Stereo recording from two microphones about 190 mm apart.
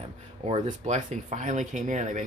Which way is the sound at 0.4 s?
35° right (ahead or behind).